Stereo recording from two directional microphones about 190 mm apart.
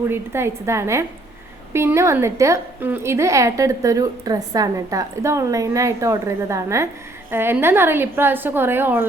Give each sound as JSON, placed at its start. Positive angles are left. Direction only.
{"t": 0.1, "sound": "a woman's voice", "side_deg": -15}